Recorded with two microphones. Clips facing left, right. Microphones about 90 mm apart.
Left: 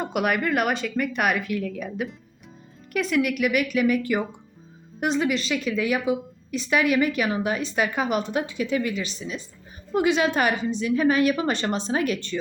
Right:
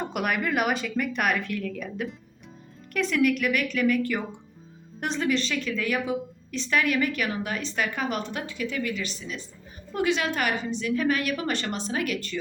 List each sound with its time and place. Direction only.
0.0 s a woman's voice: 5° left (ahead or behind); by 12.4 s 25° left (ahead or behind)